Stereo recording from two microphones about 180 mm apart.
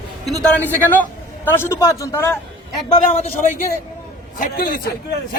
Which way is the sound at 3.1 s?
40° left (ahead or behind).